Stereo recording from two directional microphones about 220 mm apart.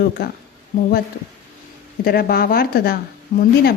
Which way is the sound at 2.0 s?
45° left (ahead or behind).